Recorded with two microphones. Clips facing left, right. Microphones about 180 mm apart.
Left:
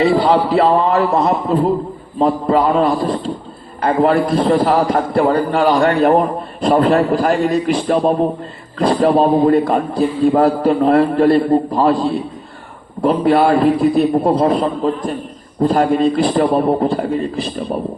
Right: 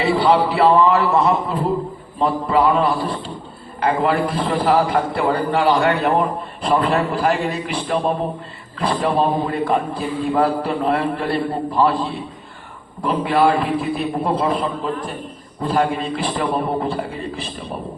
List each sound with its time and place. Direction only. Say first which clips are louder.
0.0 s a man's voice: left 3 dB; 40° left (ahead or behind)